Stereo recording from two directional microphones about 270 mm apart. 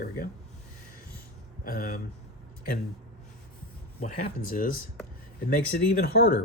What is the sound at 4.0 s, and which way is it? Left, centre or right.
Speech, left.